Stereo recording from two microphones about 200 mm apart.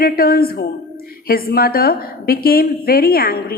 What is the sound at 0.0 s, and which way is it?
A woman's voice, 50° left (ahead or behind).